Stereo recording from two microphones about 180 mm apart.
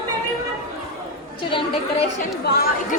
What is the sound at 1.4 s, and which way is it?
Speech, 30° left (ahead or behind).